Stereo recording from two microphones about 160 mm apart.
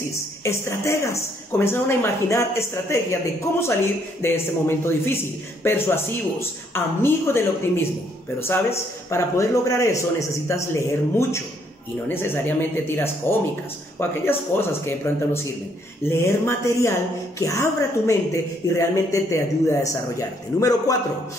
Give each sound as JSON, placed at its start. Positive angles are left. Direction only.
{"t": 0.4, "sound": "a woman's voice", "side_deg": 15}